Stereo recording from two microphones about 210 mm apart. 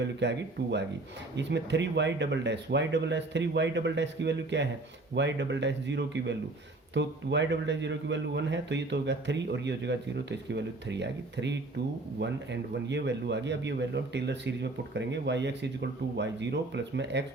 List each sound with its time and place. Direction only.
0.0 s a man's voice: 55° right (ahead or behind)